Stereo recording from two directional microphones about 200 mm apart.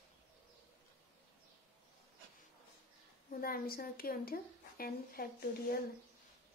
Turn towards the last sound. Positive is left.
turn(degrees=50)  # may be behind; listen again after turning